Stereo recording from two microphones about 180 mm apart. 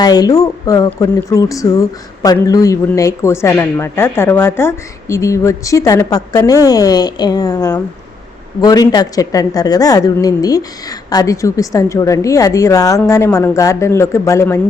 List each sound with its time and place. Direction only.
0.0 s a woman's voice: 20° left (ahead or behind)